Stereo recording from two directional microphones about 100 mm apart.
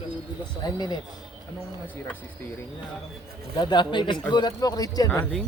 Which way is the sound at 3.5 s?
50° left (ahead or behind).